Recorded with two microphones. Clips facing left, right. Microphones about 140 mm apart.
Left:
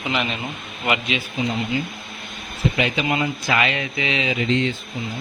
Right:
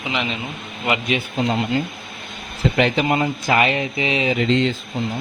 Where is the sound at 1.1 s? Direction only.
65° right (ahead or behind).